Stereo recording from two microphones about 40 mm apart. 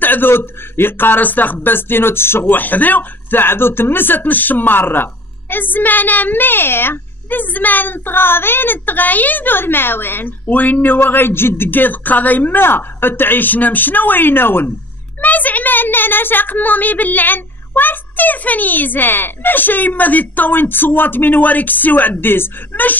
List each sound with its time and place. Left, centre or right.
0.0 s speech: left
2.4 s speech: left
15.2 s a woman's voice: left